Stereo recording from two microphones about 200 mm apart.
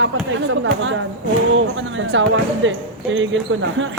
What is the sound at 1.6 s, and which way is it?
Speech, 70° right (ahead or behind).